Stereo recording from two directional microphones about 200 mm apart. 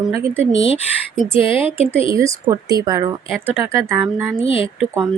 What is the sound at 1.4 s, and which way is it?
Speech, 25° left (ahead or behind).